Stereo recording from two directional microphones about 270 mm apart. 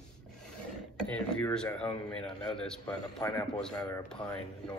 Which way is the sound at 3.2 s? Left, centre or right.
Centre.